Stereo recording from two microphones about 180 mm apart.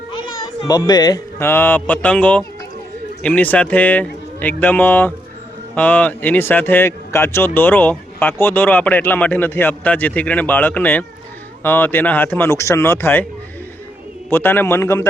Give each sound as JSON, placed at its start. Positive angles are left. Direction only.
{"t": 0.1, "sound": "speech", "side_deg": 25}
{"t": 14.3, "sound": "speech", "side_deg": 10}